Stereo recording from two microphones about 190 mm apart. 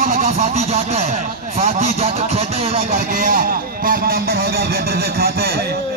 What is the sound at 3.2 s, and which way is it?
Speech, 50° right (ahead or behind).